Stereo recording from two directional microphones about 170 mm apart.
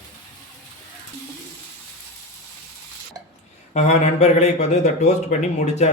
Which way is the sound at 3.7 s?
40° left (ahead or behind).